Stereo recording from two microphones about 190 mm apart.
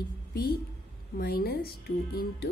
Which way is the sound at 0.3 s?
55° left (ahead or behind).